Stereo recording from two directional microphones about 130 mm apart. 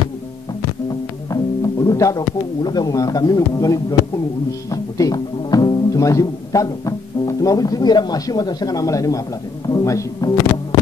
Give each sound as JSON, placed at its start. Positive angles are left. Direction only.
{"t": 1.3, "sound": "speech", "side_deg": 30}